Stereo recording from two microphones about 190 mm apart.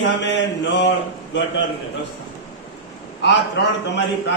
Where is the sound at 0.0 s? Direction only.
70° left (ahead or behind).